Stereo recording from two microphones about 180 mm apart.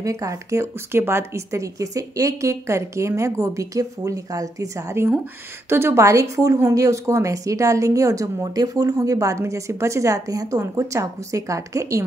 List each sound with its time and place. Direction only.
0.0 s a woman's voice: 20° right (ahead or behind)